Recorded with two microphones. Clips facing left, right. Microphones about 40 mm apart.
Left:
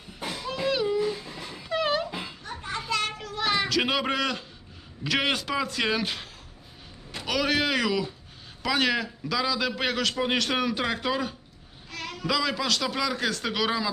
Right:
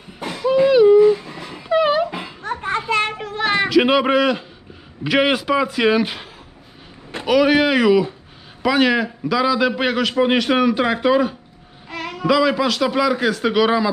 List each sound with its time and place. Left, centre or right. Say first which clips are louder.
0.2 s a sound: right 6 dB; right
0.4 s owl: right 15 dB; centre; by 1.6 s right
1.7 s dog: right 10 dB; centre
2.0 s children playing: right 6 dB; right
2.4 s children playing: right 15 dB; right
2.9 s child singing: right 6 dB; right
3.7 s a man's voice: right 11 dB; centre
7.3 s a man's voice: right 10 dB; centre
11.9 s a sound: right 9 dB; right
12.3 s a man's voice: right 10 dB; centre